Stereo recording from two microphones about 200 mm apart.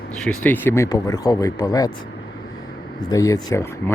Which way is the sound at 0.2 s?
5° left (ahead or behind).